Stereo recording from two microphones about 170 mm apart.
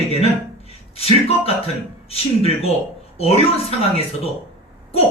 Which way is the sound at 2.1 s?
35° left (ahead or behind).